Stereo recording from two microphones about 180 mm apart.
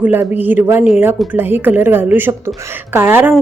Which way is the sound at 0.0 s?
10° right (ahead or behind).